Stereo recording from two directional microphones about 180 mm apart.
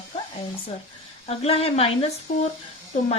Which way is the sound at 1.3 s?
35° left (ahead or behind).